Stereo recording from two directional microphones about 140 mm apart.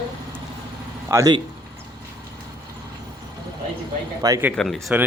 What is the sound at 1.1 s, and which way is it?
Speech, 20° right (ahead or behind).